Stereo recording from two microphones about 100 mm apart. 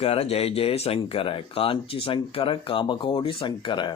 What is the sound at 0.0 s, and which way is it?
Speech, 85° left.